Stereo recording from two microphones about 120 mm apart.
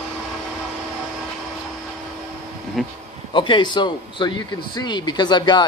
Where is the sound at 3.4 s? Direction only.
40° left (ahead or behind).